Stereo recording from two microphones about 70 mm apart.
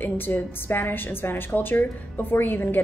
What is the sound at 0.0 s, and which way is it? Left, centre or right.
A woman's voice, left.